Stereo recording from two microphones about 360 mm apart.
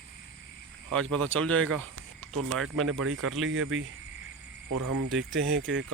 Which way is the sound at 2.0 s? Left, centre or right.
Right.